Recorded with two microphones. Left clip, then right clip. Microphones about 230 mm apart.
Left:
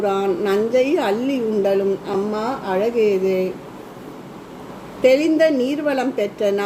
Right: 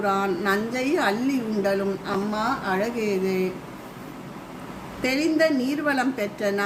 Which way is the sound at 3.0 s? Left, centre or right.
Right.